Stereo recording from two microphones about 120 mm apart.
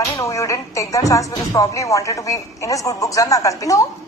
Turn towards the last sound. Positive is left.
turn(degrees=30)  # may be behind; listen again after turning